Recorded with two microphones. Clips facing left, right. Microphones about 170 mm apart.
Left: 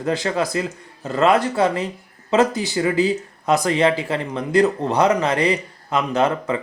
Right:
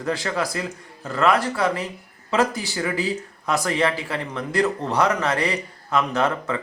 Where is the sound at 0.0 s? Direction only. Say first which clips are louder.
Left 4 dB; 20° left (ahead or behind).